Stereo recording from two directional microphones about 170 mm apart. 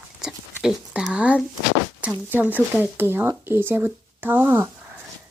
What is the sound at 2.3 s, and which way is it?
Speech, 10° right (ahead or behind).